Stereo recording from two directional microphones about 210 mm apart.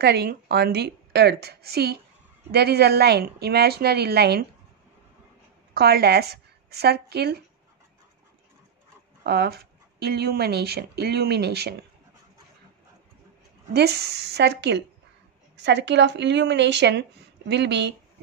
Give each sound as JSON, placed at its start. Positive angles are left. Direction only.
{"t": 0.0, "sound": "speech", "side_deg": -50}
{"t": 5.8, "sound": "speech", "side_deg": -50}
{"t": 9.2, "sound": "speech", "side_deg": -50}
{"t": 13.7, "sound": "a woman's voice", "side_deg": -50}